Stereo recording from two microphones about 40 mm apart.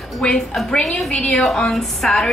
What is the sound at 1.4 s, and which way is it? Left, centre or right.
Speech, centre.